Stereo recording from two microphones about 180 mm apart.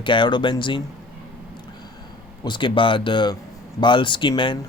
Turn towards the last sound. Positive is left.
turn(degrees=25)  # may be behind; listen again after turning